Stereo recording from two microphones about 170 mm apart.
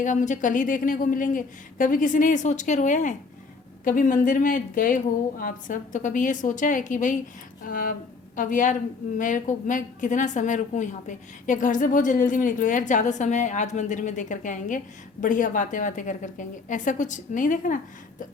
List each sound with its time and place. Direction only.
0.0 s a woman's voice: 45° left (ahead or behind)